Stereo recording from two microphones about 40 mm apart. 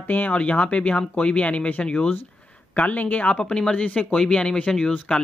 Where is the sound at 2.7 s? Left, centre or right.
Left.